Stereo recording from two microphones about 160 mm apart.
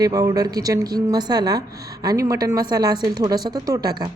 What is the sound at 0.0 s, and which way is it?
A woman's voice, 20° right (ahead or behind).